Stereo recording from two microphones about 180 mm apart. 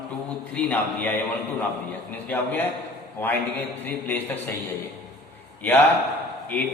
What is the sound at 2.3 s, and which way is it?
Speech, 10° left (ahead or behind).